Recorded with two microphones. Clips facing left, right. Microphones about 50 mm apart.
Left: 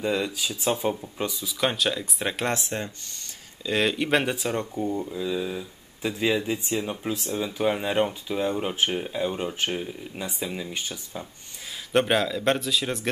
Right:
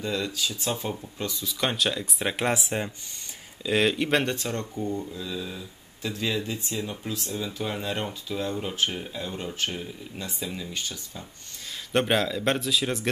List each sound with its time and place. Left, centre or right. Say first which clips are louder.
0.0 s speech: left 3 dB; centre
1.3 s speech: left 1 dB; centre; by 11.2 s left
11.9 s speech: left 2 dB; centre